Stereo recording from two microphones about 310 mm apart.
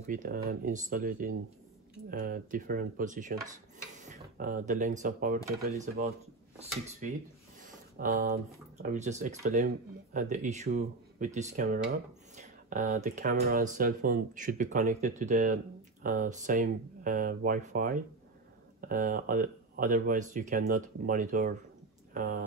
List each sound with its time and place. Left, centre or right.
0.0 s speech: right
7.6 s a sound: right
8.8 s speech: right